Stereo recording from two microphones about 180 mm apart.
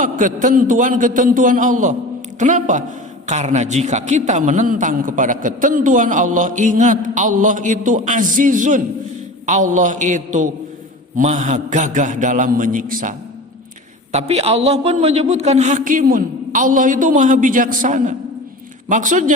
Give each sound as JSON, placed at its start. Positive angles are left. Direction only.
{"t": 0.0, "sound": "a man's voice", "side_deg": -45}
{"t": 14.1, "sound": "a man's voice", "side_deg": -35}